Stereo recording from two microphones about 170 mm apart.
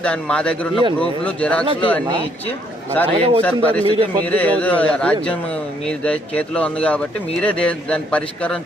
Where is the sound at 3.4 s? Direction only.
10° left (ahead or behind).